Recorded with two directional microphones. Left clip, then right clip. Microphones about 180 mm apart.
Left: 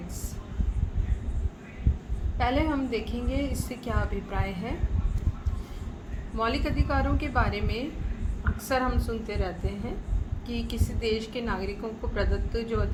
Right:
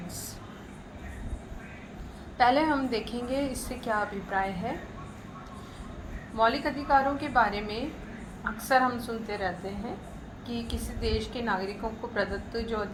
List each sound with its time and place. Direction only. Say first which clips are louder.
2.4 s a woman's voice: right 4 dB; 10° left (ahead or behind)
6.3 s a woman's voice: right 3 dB; 25° left (ahead or behind)